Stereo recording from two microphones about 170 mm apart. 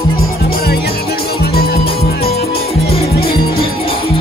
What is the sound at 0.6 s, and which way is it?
Music, 65° left (ahead or behind).